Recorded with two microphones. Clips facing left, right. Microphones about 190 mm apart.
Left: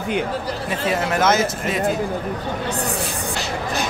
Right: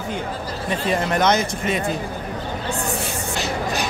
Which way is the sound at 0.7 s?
5° left (ahead or behind).